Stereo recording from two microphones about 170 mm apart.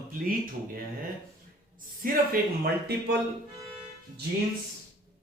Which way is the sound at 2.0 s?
65° right (ahead or behind).